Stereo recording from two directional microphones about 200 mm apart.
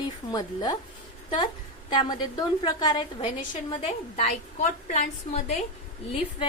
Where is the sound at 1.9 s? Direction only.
20° left (ahead or behind); by 5.4 s 40° left (ahead or behind).